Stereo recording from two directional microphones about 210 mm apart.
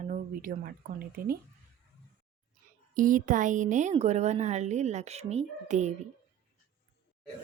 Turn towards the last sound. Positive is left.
turn(degrees=-35)  # may be behind; listen again after turning